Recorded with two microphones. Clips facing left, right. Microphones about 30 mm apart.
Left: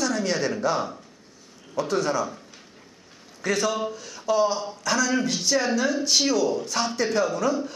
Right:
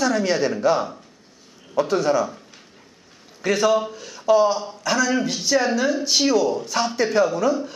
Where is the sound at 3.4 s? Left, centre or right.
Centre.